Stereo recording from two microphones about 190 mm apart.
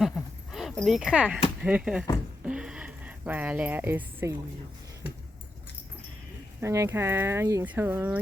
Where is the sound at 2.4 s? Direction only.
5° right (ahead or behind).